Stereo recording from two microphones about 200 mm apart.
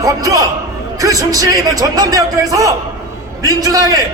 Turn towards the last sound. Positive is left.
turn(degrees=-15)  # may be behind; listen again after turning